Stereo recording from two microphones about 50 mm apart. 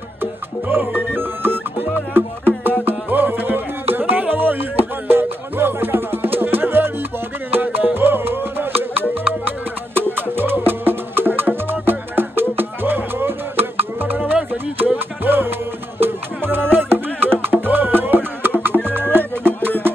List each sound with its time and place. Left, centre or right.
0.2 s music: right